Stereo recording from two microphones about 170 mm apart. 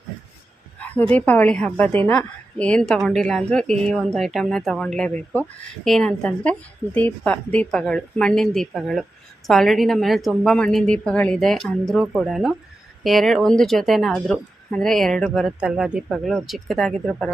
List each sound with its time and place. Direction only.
0.8 s a woman's voice: 10° left (ahead or behind)